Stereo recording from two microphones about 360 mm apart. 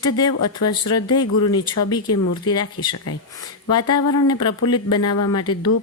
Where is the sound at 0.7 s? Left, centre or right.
Centre.